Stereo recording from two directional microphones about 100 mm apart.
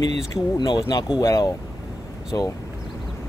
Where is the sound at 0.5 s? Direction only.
50° left (ahead or behind).